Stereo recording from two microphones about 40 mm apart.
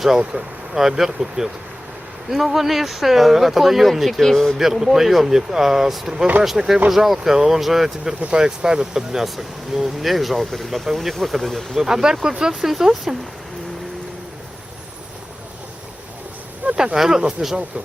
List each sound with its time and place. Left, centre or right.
0.3 s speech: centre
4.5 s speech: centre
8.3 s speech: centre
12.0 s speech: centre
12.7 s speech: centre
16.7 s speech: centre